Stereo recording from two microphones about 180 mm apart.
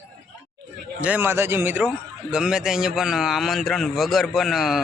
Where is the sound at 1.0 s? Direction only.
10° right (ahead or behind).